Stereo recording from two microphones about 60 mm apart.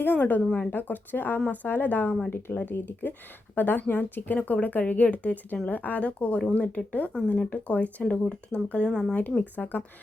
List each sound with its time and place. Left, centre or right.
0.0 s speech: left; by 9.1 s centre
9.1 s speech: left